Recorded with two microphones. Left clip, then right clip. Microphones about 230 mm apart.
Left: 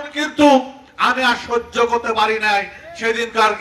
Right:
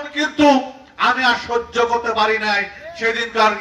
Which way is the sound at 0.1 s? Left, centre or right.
Left.